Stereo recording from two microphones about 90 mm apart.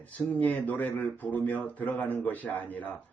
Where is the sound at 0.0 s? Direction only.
15° left (ahead or behind).